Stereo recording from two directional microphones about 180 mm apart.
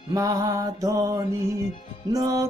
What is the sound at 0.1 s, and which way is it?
Music, 15° right (ahead or behind).